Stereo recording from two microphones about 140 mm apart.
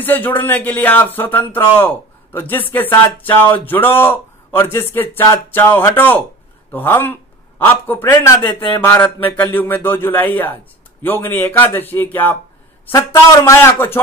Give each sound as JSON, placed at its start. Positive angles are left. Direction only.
{"t": 0.0, "sound": "a man's voice", "side_deg": 15}